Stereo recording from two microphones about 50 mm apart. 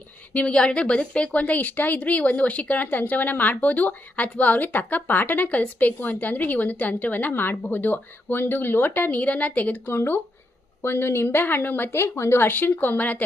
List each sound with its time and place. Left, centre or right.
0.3 s a woman's voice: left
9.9 s a woman's voice: left